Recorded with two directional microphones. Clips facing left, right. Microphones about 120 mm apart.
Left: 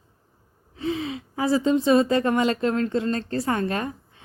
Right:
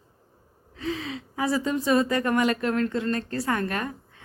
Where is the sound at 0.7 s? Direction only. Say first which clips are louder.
Left 4 dB; 25° left (ahead or behind).